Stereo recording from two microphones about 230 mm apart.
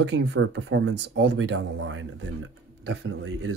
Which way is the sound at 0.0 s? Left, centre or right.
Right.